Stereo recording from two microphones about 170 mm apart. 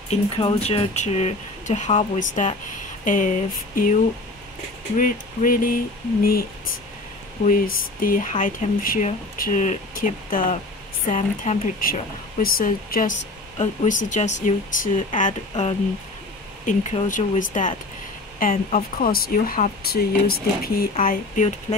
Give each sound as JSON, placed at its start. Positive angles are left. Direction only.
{"t": 0.1, "sound": "speech", "side_deg": 35}
{"t": 4.9, "sound": "speech", "side_deg": 50}
{"t": 7.4, "sound": "speech", "side_deg": 55}
{"t": 21.0, "sound": "speech", "side_deg": 50}